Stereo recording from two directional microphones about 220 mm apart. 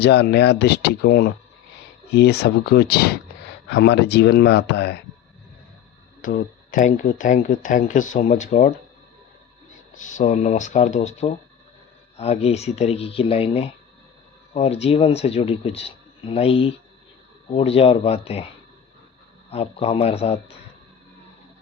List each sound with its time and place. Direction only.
0.0 s speech: 50° left (ahead or behind)
6.2 s speech: 40° left (ahead or behind)
9.9 s speech: 35° left (ahead or behind)
19.5 s speech: 25° left (ahead or behind)